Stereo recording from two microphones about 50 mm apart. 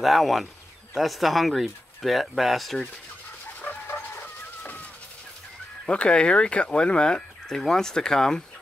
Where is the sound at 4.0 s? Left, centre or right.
Left.